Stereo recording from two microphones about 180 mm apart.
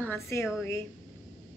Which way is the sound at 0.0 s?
10° left (ahead or behind).